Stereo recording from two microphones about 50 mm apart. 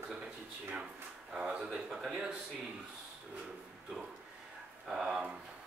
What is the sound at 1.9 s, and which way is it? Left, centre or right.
Speech, centre.